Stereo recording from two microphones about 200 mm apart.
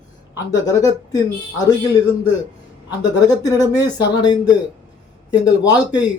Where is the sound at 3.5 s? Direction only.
15° right (ahead or behind).